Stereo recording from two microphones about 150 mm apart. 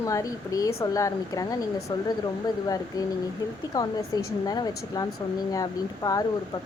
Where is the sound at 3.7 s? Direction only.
25° left (ahead or behind).